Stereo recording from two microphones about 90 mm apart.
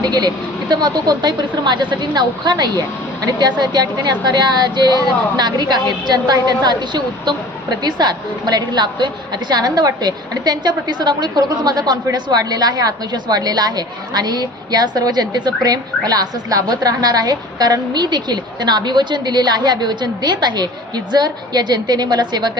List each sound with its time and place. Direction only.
0.0 s a woman's voice: 50° right (ahead or behind)